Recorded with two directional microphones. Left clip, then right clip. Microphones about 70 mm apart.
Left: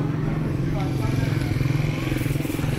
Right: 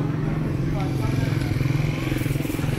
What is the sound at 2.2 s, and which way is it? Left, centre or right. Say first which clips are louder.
Vehicle: even; left.